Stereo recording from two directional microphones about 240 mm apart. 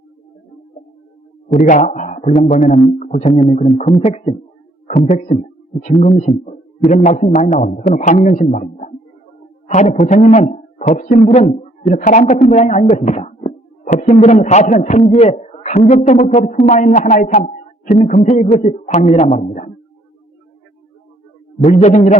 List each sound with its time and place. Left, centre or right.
1.5 s a man's voice: left
21.6 s a man's voice: left